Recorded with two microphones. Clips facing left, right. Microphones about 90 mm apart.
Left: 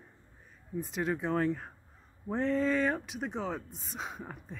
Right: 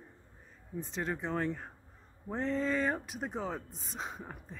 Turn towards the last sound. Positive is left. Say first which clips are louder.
# left 2 dB
turn(degrees=0)  # may be behind; listen again after turning